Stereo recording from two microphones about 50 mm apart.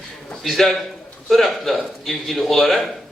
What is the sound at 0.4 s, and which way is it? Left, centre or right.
A man's voice, centre.